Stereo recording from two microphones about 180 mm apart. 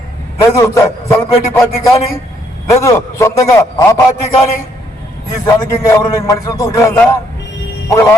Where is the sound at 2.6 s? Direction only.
15° left (ahead or behind).